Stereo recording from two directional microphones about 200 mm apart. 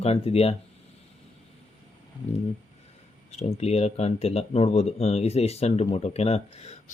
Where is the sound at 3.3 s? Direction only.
30° left (ahead or behind).